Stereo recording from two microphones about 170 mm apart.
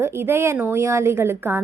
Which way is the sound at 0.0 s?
15° right (ahead or behind).